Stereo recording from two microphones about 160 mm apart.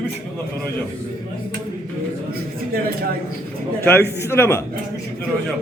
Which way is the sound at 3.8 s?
15° left (ahead or behind).